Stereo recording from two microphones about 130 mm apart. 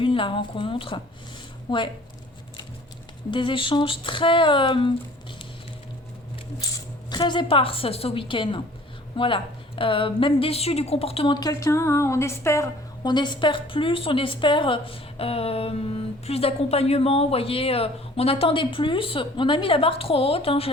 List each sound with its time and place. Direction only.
0.0 s speech: 40° left (ahead or behind)
3.3 s speech: 40° left (ahead or behind)
6.6 s a woman's voice: 30° left (ahead or behind); by 11.3 s 45° left (ahead or behind)
11.3 s a woman's voice: 25° left (ahead or behind); by 20.7 s 45° left (ahead or behind)